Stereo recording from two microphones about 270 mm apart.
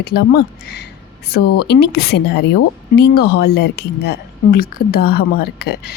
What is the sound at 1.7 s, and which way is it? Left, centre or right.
Speech, left.